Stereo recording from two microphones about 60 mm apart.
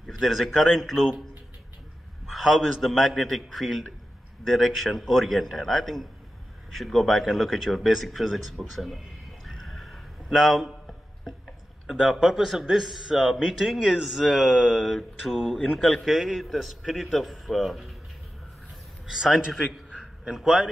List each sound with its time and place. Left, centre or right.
0.2 s a man's voice: centre
2.2 s a man's voice: centre
9.5 s a sound: centre
11.9 s a man's voice: centre
19.0 s a man's voice: centre
19.9 s a sound: centre
20.3 s a man's voice: centre